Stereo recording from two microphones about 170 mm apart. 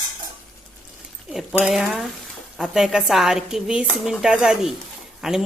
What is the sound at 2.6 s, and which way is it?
Speech, centre (ahead or behind).